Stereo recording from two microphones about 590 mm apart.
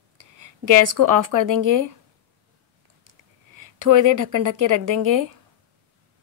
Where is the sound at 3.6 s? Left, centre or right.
Right.